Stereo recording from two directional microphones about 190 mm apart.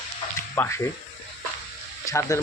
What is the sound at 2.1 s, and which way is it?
Speech, 15° left (ahead or behind).